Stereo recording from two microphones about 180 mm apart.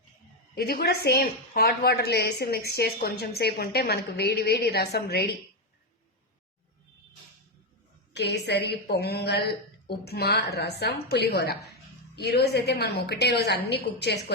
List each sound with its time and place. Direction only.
0.5 s a woman's voice: 60° left (ahead or behind)
8.1 s a woman's voice: 70° left (ahead or behind)